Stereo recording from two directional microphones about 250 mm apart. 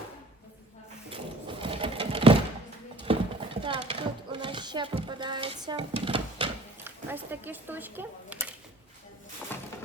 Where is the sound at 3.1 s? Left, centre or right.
Right.